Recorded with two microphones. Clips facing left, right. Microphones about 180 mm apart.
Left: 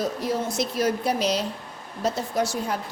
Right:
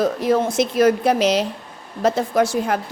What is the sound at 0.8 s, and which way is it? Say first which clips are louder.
A woman's voice: right 8 dB; 90° right.